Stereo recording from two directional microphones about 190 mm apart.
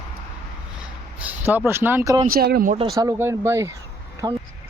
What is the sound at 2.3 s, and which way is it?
Speech, 50° right (ahead or behind).